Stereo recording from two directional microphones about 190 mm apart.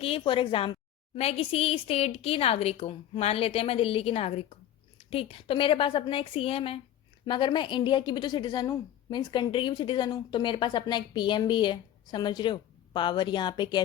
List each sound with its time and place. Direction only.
0.0 s a woman's voice: 30° left (ahead or behind)